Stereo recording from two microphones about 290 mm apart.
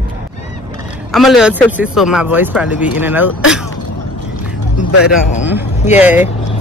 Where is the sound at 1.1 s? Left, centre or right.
Centre.